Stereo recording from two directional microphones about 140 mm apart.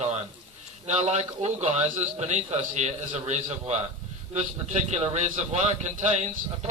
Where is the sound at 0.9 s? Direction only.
50° right (ahead or behind).